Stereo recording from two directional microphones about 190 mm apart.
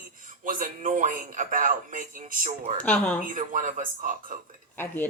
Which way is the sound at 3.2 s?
45° right (ahead or behind).